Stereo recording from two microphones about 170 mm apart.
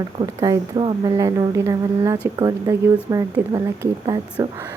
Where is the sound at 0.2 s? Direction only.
20° right (ahead or behind).